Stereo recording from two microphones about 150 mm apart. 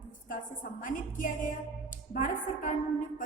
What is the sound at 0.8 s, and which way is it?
A woman's voice, 65° left (ahead or behind).